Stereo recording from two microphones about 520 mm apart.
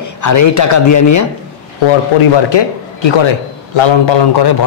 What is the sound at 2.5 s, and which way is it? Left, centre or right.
A man's voice, left.